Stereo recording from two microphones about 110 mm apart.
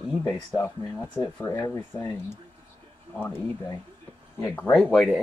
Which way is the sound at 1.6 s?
35° left (ahead or behind).